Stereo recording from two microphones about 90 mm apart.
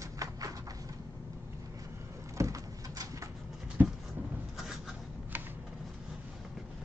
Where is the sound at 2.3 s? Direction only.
35° right (ahead or behind).